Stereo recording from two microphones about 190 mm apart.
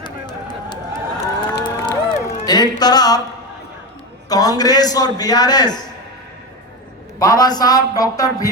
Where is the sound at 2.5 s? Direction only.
20° left (ahead or behind).